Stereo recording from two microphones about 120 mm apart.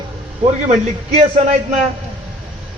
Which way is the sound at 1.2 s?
65° right (ahead or behind).